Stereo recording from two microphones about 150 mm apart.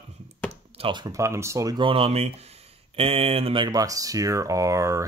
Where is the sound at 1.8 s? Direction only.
40° right (ahead or behind).